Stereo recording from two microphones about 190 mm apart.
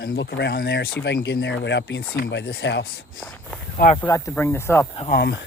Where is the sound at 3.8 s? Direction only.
50° left (ahead or behind).